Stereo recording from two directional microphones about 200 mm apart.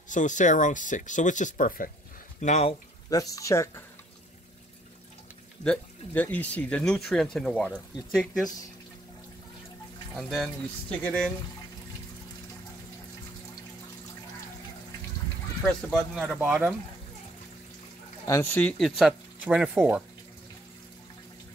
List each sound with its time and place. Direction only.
0.1 s speech: 40° left (ahead or behind)
3.1 s speech: 15° left (ahead or behind)
5.6 s speech: 5° left (ahead or behind)
10.1 s speech: centre (ahead or behind)
15.6 s speech: centre (ahead or behind)
18.2 s speech: 15° left (ahead or behind); by 20.0 s 5° right (ahead or behind)